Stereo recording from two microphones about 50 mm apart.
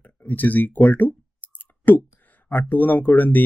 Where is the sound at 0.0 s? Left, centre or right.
Left.